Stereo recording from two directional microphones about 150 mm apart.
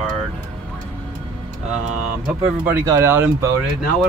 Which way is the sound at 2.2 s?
10° right (ahead or behind).